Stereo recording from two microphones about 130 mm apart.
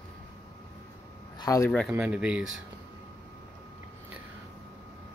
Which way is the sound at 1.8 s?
10° right (ahead or behind).